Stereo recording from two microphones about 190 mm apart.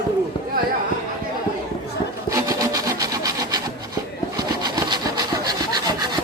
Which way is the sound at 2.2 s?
15° right (ahead or behind).